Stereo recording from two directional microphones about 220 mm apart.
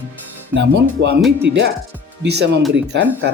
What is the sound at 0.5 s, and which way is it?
Speech, 55° right (ahead or behind).